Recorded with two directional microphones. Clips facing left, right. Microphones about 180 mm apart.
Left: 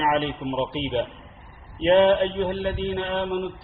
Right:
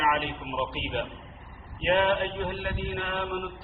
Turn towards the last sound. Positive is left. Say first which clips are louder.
# left 6 dB
turn(degrees=30)  # may be behind; listen again after turning